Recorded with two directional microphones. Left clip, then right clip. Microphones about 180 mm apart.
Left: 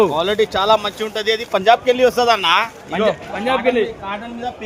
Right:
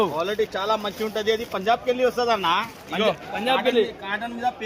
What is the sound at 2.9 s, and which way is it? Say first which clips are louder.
Speech: left 1 dB; 10° left (ahead or behind).